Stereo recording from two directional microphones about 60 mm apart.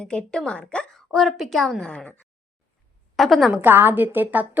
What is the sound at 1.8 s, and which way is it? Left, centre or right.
Speech, centre.